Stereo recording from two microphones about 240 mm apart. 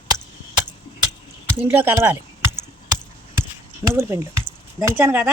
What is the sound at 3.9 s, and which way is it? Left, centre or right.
Speech, centre.